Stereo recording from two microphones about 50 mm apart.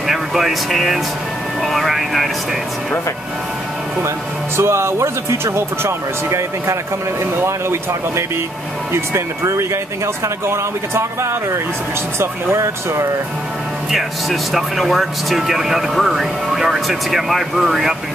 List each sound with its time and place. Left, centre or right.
0.0 s speech: centre
4.6 s speech: right
8.9 s speech: right
12.2 s speech: right
13.9 s speech: centre